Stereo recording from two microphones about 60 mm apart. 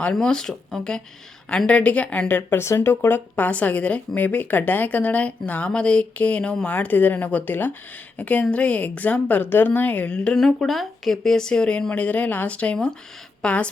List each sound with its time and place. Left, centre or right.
0.0 s speech: centre; by 2.6 s left
2.6 s speech: left
2.9 s speech: left; by 6.7 s centre
6.7 s speech: left
9.4 s speech: left; by 10.3 s centre
10.3 s a woman's voice: centre